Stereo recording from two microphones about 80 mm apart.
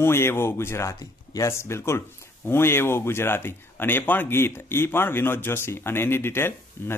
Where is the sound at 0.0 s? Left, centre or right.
Left.